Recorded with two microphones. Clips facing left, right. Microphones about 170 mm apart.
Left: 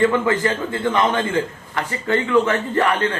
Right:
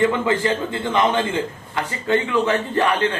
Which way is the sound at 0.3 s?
20° right (ahead or behind).